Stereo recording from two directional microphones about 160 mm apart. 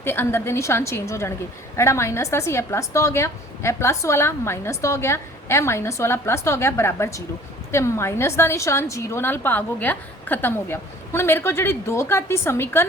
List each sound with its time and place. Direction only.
0.0 s a woman's voice: 15° left (ahead or behind)